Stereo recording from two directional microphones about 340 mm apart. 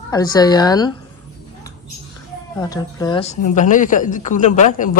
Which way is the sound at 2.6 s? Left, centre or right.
Centre.